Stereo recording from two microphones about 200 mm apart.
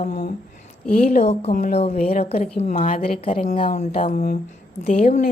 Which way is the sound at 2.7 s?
45° left (ahead or behind).